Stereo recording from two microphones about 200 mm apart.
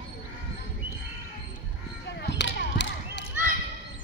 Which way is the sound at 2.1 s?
60° left (ahead or behind).